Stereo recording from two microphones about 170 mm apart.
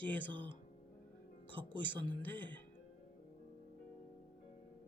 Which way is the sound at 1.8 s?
10° left (ahead or behind).